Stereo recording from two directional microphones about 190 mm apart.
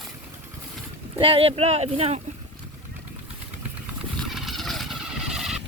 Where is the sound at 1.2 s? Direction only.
30° right (ahead or behind).